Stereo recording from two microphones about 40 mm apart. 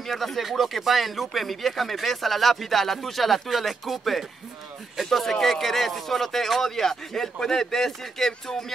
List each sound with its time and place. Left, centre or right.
0.0 s speech: centre